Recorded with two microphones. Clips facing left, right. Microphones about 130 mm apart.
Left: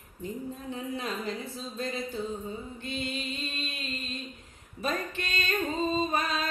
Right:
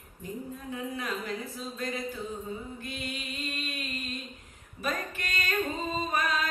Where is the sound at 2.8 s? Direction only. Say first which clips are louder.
Left 3 dB; 25° left (ahead or behind).